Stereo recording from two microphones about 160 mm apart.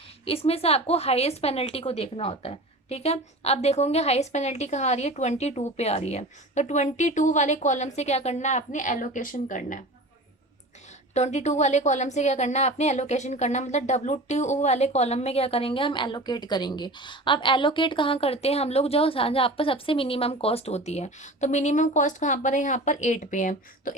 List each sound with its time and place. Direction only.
0.3 s a woman's voice: 35° left (ahead or behind); by 9.8 s 55° left (ahead or behind)
11.1 s a woman's voice: 45° left (ahead or behind)